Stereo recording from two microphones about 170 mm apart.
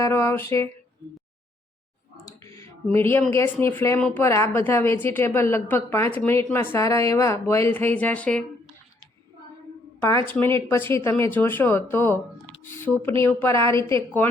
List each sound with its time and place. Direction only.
0.0 s a woman's voice: 15° left (ahead or behind)
2.4 s a sound: 15° left (ahead or behind)
3.3 s a woman's voice: 15° left (ahead or behind)
10.2 s a woman's voice: 10° left (ahead or behind)